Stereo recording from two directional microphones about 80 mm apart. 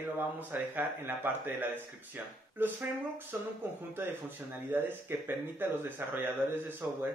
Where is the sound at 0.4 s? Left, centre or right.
Right.